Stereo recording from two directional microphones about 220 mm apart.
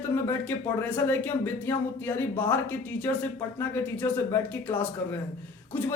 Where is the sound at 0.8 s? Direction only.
10° left (ahead or behind).